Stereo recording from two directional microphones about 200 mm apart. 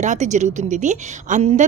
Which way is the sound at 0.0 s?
35° right (ahead or behind).